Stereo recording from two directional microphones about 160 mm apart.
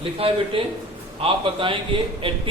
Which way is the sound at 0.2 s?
35° right (ahead or behind).